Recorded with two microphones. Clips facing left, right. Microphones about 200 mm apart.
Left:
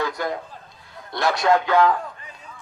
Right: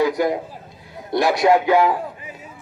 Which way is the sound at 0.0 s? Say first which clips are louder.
Right 7 dB; 15° right (ahead or behind).